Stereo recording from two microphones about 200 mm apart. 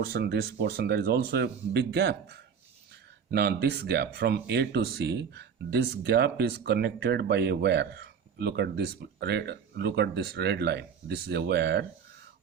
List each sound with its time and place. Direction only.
0.0 s speech: 55° right (ahead or behind)